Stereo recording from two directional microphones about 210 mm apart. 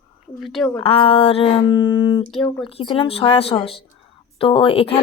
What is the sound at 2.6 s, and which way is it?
Speech, 25° left (ahead or behind).